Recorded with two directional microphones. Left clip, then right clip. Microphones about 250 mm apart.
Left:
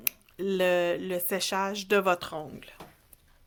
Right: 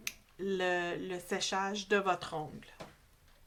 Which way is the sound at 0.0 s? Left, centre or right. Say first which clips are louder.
Left 6 dB; left.